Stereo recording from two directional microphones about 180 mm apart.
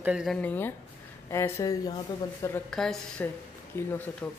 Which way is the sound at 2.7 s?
5° left (ahead or behind).